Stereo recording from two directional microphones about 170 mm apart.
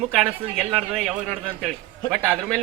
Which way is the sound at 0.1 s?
5° right (ahead or behind).